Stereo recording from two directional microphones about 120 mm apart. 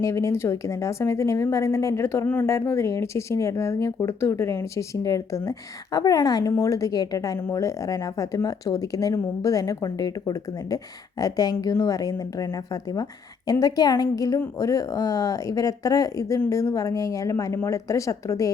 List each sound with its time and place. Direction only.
0.0 s a woman's voice: 25° left (ahead or behind)